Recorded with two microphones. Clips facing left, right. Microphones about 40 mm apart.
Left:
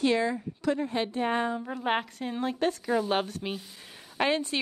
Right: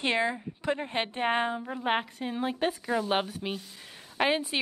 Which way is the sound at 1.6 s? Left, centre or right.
Centre.